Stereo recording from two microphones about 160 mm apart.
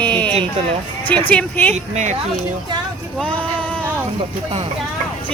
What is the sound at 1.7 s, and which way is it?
Speech, 45° right (ahead or behind).